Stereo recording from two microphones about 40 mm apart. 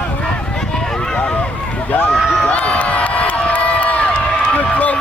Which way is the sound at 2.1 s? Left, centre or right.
Centre.